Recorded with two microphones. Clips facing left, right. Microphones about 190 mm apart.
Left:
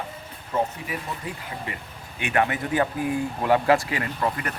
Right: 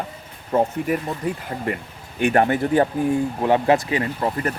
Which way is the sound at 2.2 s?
40° right (ahead or behind).